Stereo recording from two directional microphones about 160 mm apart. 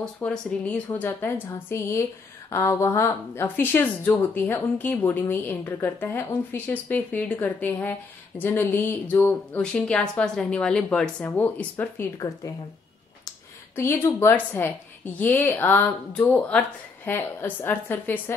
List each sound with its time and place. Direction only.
0.0 s speech: 5° left (ahead or behind)
13.7 s speech: 15° left (ahead or behind)